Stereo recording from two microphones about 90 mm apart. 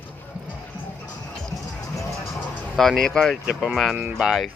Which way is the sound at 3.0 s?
5° left (ahead or behind).